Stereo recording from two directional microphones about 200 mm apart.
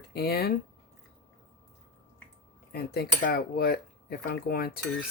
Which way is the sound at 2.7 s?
50° left (ahead or behind).